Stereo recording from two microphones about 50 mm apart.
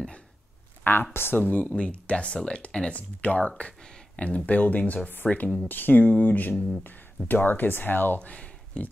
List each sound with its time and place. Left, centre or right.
1.1 s speech: left
1.8 s speech: left
8.2 s a sound: left